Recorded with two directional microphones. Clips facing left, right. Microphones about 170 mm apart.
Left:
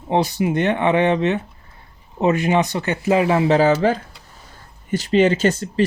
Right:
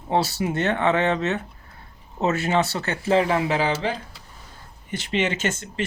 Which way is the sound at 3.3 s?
30° left (ahead or behind).